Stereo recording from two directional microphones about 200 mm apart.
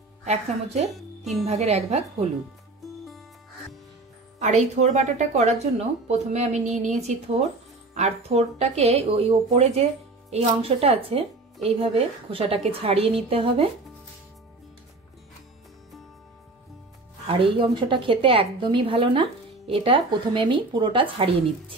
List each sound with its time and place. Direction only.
0.2 s speech: 35° right (ahead or behind)
0.8 s speech: centre (ahead or behind)
1.4 s speech: 30° right (ahead or behind)
4.4 s a woman's voice: 35° right (ahead or behind)
17.3 s a woman's voice: 25° right (ahead or behind)